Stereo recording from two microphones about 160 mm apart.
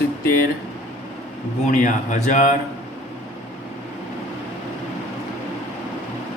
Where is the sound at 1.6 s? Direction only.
50° left (ahead or behind).